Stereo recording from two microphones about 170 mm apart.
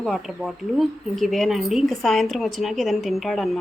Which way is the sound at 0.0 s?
Centre (ahead or behind).